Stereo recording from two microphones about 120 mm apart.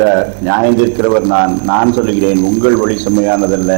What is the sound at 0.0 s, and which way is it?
Speech, 20° right (ahead or behind).